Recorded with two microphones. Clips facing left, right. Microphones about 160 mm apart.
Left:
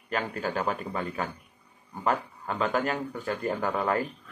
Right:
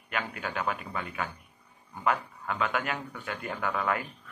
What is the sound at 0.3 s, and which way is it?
Speech, 35° left (ahead or behind).